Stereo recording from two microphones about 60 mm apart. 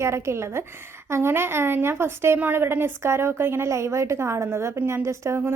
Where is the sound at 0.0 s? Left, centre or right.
Right.